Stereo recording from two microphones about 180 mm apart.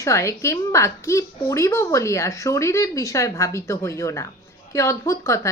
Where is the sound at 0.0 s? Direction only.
15° left (ahead or behind).